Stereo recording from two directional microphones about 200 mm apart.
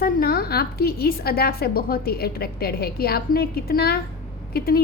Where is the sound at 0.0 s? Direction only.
50° left (ahead or behind).